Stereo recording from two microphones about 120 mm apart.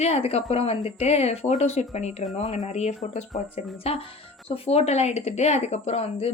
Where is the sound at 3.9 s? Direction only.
60° left (ahead or behind).